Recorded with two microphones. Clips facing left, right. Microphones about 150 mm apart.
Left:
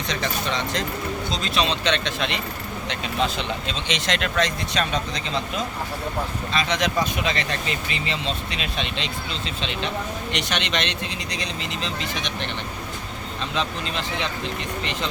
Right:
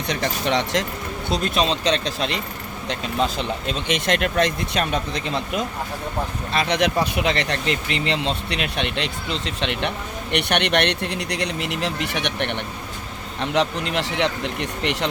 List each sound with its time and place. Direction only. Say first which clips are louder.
0.1 s speech: right 5 dB; 65° right (ahead or behind)
1.8 s speech: right 2 dB; 35° right (ahead or behind)
2.9 s speech: right 2 dB; 50° right (ahead or behind)
6.5 s speech: right 4 dB; 60° right (ahead or behind)